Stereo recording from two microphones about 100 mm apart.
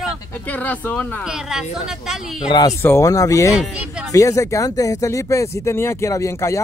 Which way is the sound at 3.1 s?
35° left (ahead or behind).